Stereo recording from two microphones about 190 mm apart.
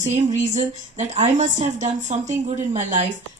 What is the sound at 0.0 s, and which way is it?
Speech, 40° right (ahead or behind).